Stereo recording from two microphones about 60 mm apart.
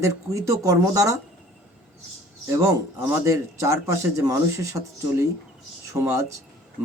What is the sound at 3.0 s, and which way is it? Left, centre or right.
Speech, right.